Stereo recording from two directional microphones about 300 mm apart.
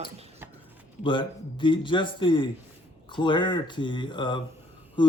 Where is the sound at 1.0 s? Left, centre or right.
Centre.